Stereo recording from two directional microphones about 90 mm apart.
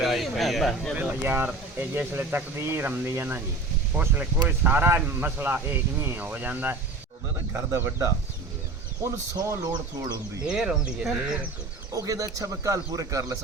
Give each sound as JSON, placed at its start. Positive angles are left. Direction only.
{"t": 0.0, "sound": "a sound", "side_deg": 0}
{"t": 0.9, "sound": "speech", "side_deg": -20}
{"t": 7.5, "sound": "speech", "side_deg": -35}
{"t": 10.4, "sound": "speech", "side_deg": -10}
{"t": 11.9, "sound": "speech", "side_deg": -40}